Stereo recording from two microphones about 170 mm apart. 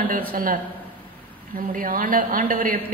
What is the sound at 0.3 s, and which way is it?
Speech, 55° right (ahead or behind).